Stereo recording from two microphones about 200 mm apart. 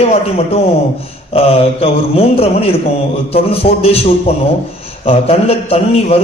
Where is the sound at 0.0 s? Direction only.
30° left (ahead or behind).